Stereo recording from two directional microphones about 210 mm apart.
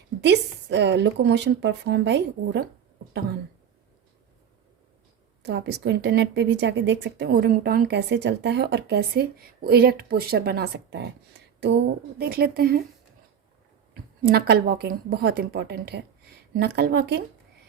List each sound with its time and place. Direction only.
0.2 s a woman's voice: 55° right (ahead or behind)
5.4 s speech: 55° right (ahead or behind)
13.9 s speech: 50° right (ahead or behind)